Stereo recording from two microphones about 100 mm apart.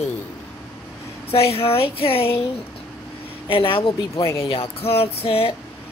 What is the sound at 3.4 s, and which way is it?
Speech, 65° left (ahead or behind).